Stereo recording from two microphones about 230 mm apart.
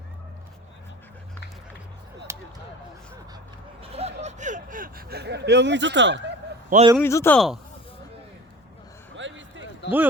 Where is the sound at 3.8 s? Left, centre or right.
Right.